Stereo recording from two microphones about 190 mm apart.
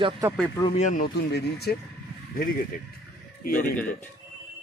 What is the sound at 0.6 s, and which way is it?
Speech, 35° left (ahead or behind).